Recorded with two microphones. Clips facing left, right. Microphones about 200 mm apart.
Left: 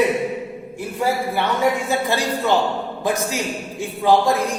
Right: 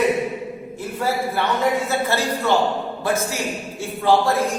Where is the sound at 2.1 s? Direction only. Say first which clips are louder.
Left 1 dB; 15° left (ahead or behind).